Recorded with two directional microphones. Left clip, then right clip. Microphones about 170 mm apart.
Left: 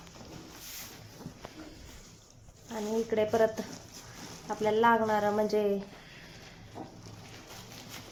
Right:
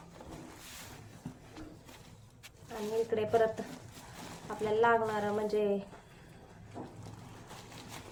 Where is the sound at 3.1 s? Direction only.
50° left (ahead or behind).